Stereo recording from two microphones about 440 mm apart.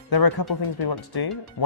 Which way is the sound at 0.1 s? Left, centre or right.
Left.